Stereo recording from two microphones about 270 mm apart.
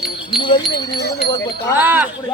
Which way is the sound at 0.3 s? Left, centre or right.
Centre.